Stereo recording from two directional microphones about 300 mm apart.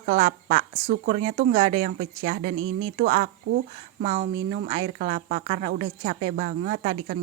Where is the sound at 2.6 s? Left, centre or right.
Right.